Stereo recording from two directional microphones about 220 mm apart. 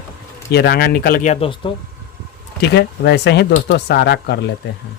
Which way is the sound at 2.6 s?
50° left (ahead or behind).